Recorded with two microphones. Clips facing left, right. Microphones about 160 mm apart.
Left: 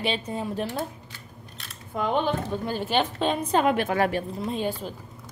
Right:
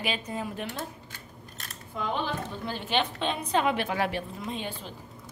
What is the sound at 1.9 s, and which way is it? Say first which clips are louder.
A woman's voice: left 6 dB; 50° left (ahead or behind).